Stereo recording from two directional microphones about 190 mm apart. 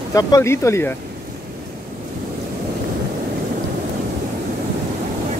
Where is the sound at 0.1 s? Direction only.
15° left (ahead or behind).